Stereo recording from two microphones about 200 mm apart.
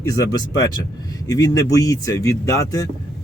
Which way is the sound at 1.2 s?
15° left (ahead or behind).